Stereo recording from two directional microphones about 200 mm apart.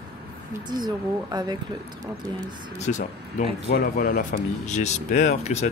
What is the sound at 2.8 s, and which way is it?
Speech, 35° left (ahead or behind).